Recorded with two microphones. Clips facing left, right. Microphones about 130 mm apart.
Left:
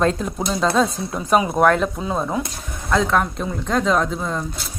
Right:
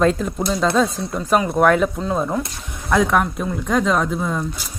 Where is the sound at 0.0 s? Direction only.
Centre (ahead or behind).